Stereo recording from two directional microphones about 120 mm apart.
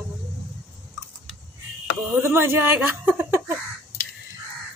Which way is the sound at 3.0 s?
20° right (ahead or behind).